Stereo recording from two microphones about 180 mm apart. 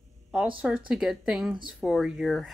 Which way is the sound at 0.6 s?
5° right (ahead or behind).